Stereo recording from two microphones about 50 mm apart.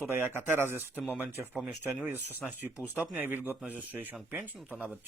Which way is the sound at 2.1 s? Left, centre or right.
Right.